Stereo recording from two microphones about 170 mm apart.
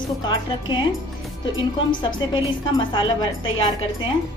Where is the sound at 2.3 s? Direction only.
30° left (ahead or behind).